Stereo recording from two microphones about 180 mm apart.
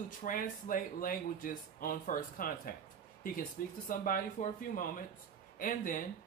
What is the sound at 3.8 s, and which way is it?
Speech, 50° left (ahead or behind).